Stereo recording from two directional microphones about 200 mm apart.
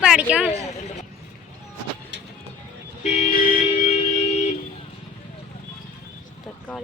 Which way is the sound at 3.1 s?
35° left (ahead or behind).